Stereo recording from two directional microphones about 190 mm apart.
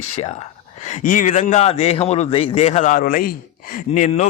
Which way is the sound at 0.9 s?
40° left (ahead or behind).